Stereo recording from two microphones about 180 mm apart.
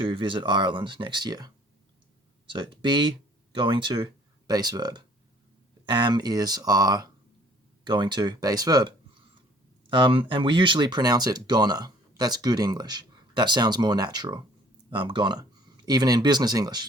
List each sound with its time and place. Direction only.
0.0 s speech: 25° right (ahead or behind)
2.5 s speech: 25° right (ahead or behind)